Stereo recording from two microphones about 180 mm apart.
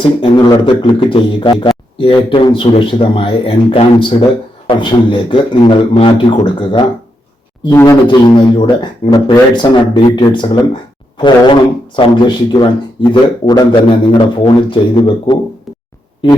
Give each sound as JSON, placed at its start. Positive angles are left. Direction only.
{"t": 0.0, "sound": "a man's voice", "side_deg": 25}
{"t": 11.9, "sound": "a man's voice", "side_deg": 25}